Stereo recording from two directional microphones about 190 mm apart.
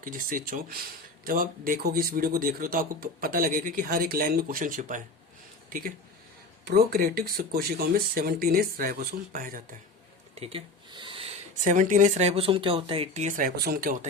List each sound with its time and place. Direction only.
0.0 s speech: 45° right (ahead or behind)
6.7 s speech: 55° right (ahead or behind)
10.4 s speech: 30° right (ahead or behind); by 14.1 s 50° right (ahead or behind)